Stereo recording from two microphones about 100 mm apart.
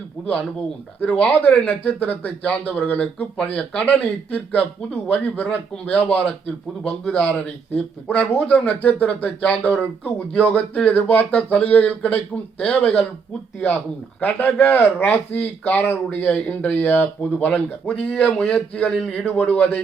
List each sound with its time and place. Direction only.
1.2 s a man's voice: 15° left (ahead or behind)